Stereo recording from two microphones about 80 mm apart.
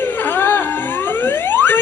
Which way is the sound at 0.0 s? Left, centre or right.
Left.